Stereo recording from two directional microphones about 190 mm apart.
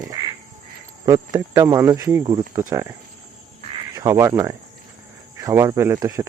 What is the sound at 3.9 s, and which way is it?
Speech, 15° right (ahead or behind).